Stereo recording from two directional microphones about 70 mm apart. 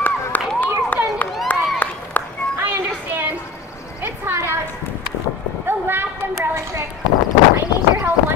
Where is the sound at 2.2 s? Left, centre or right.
Left.